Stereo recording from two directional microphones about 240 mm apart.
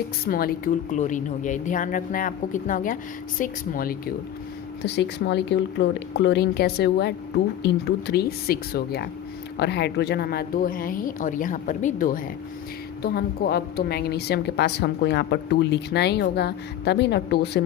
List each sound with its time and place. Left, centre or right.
0.3 s a woman's voice: left